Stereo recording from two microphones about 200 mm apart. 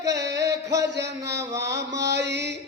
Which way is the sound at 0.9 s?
60° right (ahead or behind).